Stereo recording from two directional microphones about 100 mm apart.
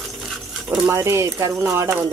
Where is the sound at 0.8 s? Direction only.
30° right (ahead or behind).